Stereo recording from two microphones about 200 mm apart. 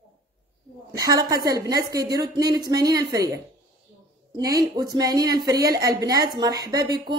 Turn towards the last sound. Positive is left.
turn(degrees=-20)  # may be behind; listen again after turning